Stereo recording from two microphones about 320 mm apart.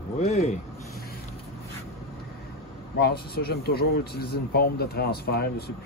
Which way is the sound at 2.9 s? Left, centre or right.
Left.